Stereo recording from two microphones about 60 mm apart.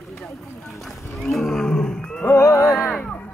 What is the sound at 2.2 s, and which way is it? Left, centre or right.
Music, left.